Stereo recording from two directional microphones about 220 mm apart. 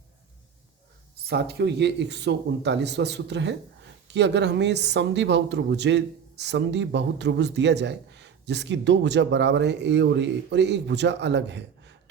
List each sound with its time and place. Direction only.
1.3 s speech: 45° right (ahead or behind)